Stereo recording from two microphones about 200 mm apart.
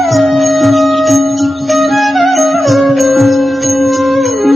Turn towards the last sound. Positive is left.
turn(degrees=0)  # may be behind; listen again after turning